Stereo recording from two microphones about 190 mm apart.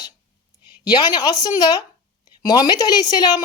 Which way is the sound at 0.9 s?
20° left (ahead or behind).